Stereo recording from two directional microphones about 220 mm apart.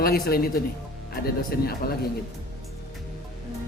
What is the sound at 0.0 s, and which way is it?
Speech, 45° left (ahead or behind).